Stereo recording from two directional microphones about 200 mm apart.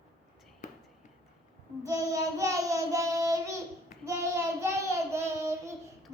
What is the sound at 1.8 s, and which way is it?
Child singing, 15° right (ahead or behind).